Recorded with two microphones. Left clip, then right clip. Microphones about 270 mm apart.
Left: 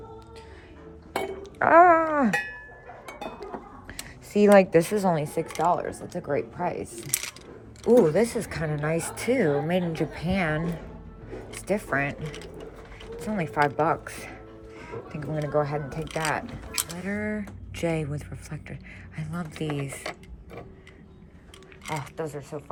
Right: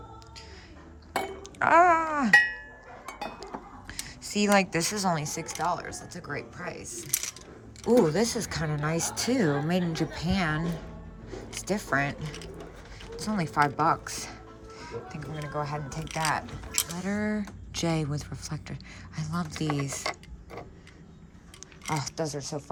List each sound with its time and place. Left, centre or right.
1.1 s chink: centre
3.1 s speech: centre
7.9 s a woman's voice: centre
22.2 s speech: right